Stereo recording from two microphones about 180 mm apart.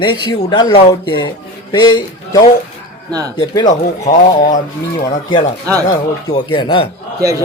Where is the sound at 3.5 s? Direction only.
20° left (ahead or behind).